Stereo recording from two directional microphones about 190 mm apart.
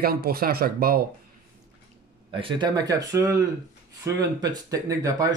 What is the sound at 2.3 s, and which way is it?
Speech, 25° right (ahead or behind).